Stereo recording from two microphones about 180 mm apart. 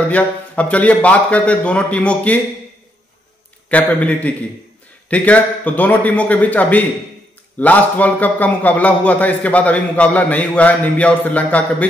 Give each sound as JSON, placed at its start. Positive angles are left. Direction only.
{"t": 0.1, "sound": "a man's voice", "side_deg": 5}
{"t": 3.6, "sound": "a man's voice", "side_deg": 10}